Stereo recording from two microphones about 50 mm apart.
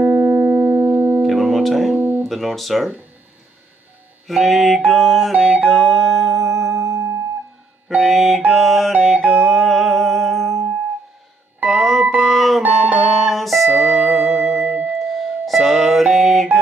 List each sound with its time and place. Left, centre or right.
0.0 s music: right
1.2 s music: centre
2.0 s guitar: right
2.2 s a sound: centre
4.3 s a sound: centre
5.6 s music: centre
6.7 s music: right
7.9 s a sound: centre
8.9 s music: centre
14.6 s music: right
14.9 s music: centre